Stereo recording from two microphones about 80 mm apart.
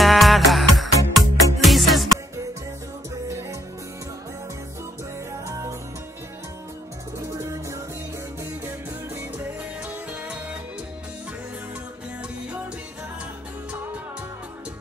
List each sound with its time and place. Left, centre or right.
0.0 s music: centre
3.3 s music: right
5.5 s music: right
7.2 s music: right
9.8 s music: centre